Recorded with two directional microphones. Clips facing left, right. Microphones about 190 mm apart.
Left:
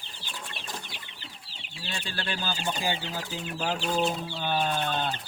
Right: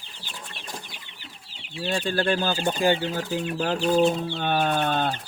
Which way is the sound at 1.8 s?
50° right (ahead or behind).